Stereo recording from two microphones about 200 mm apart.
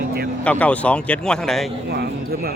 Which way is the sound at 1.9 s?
50° right (ahead or behind).